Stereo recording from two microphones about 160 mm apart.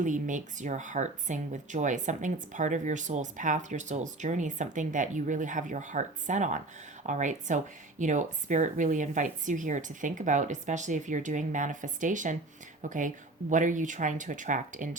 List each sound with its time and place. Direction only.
0.0 s speech: 50° right (ahead or behind)